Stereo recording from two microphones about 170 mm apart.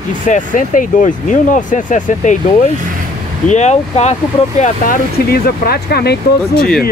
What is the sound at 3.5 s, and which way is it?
Speech, 45° left (ahead or behind).